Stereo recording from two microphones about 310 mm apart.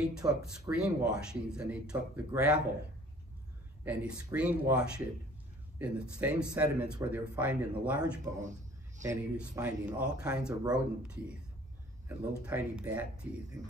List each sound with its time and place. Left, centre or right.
0.1 s speech: centre
3.8 s speech: centre
8.4 s a sound: right
9.0 s speech: centre
12.4 s speech: centre